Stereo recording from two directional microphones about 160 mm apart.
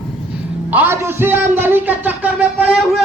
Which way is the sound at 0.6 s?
10° right (ahead or behind).